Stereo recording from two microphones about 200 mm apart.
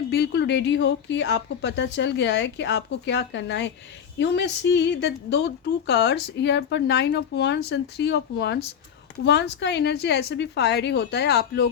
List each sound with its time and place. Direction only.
0.1 s speech: 55° left (ahead or behind)